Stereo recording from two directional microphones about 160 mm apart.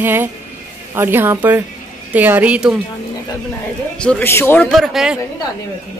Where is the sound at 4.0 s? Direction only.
10° left (ahead or behind).